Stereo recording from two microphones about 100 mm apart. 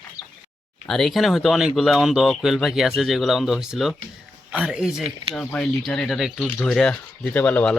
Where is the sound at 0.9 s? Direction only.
Centre (ahead or behind).